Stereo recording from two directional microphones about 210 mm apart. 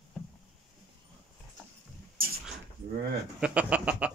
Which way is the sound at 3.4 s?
5° right (ahead or behind).